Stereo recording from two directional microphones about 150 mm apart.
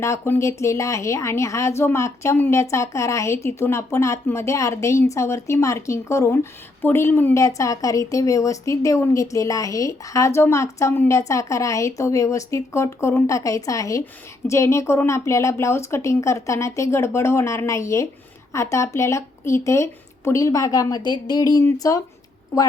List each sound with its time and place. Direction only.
0.0 s speech: 20° left (ahead or behind)